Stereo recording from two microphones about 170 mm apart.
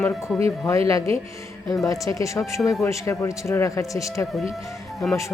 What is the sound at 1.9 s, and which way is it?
A woman's voice, 20° left (ahead or behind).